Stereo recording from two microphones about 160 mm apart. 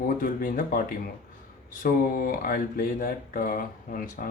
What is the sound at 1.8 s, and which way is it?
Speech, 65° left (ahead or behind).